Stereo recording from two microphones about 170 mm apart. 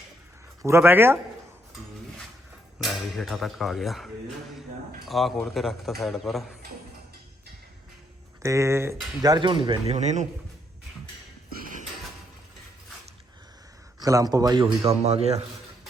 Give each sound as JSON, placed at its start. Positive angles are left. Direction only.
{"t": 0.6, "sound": "speech", "side_deg": -15}
{"t": 2.8, "sound": "speech", "side_deg": 0}
{"t": 8.4, "sound": "speech", "side_deg": -15}
{"t": 9.2, "sound": "speech", "side_deg": -25}
{"t": 14.0, "sound": "speech", "side_deg": -20}